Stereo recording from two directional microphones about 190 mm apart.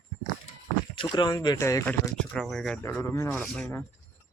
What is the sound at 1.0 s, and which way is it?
Speech, 25° left (ahead or behind).